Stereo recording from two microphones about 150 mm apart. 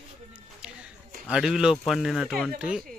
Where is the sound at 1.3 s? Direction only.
5° right (ahead or behind).